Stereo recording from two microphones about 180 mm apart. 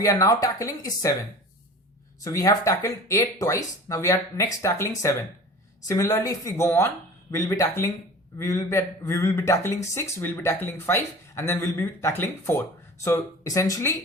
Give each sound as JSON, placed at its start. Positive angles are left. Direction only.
{"t": 0.0, "sound": "speech", "side_deg": 20}
{"t": 2.2, "sound": "speech", "side_deg": 20}